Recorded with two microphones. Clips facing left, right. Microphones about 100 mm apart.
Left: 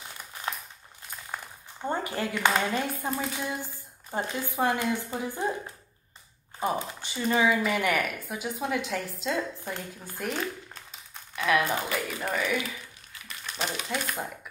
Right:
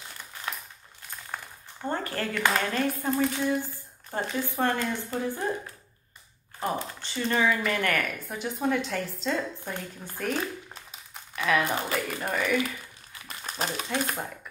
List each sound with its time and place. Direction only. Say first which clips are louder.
1.3 s a woman's voice: even; 10° left (ahead or behind)
6.6 s speech: left 1 dB; 15° left (ahead or behind)
11.3 s crumpling: even; centre (ahead or behind)
11.7 s speech: right 1 dB; centre (ahead or behind)
13.3 s a sound: right 1 dB; 40° right (ahead or behind)